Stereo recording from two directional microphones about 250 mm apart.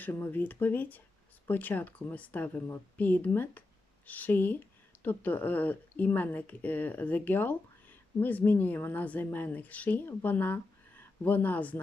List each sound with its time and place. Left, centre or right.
0.0 s speech: centre